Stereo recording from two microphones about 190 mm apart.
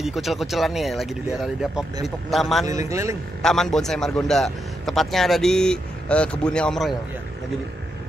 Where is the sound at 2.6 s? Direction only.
15° right (ahead or behind).